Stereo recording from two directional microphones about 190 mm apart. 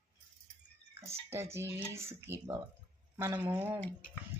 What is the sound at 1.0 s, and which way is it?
Speech, 15° right (ahead or behind).